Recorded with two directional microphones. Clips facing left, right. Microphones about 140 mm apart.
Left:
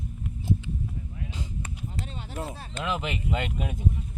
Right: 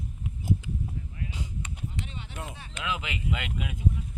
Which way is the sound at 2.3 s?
35° left (ahead or behind).